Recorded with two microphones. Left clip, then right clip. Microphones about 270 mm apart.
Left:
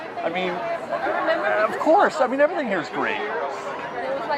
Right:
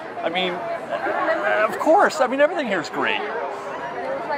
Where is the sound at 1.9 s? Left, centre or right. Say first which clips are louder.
Right 1 dB; centre.